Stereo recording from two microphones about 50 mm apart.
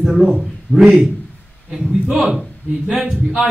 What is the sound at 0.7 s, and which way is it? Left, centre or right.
Speech, left.